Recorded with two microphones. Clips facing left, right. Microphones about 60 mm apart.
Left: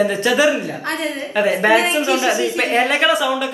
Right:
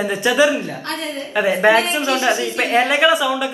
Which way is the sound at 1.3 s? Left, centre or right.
Centre.